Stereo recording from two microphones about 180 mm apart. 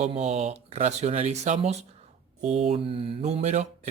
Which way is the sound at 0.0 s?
35° right (ahead or behind).